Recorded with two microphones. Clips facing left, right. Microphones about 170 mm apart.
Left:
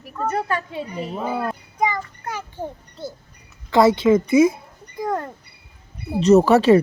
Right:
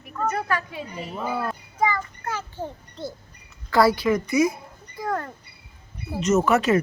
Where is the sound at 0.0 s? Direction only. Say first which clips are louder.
Left 2 dB; 30° left (ahead or behind); by 2.6 s 15° left (ahead or behind).